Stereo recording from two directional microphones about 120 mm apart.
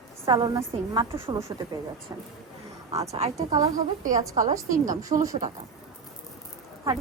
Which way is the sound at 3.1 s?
60° right (ahead or behind).